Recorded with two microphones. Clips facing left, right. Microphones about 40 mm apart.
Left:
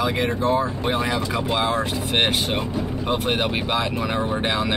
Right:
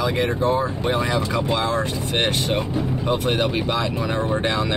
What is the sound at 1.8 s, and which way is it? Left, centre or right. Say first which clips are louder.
Speech: left 1 dB; centre.